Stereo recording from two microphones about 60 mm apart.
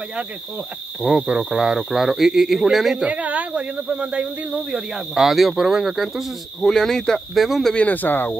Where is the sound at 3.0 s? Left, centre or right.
Right.